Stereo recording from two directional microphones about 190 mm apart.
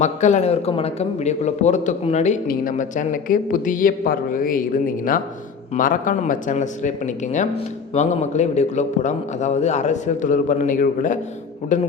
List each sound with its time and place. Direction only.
0.0 s speech: 40° left (ahead or behind)